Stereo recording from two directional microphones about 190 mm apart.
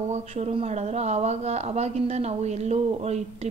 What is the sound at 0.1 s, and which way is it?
A woman's voice, 35° right (ahead or behind).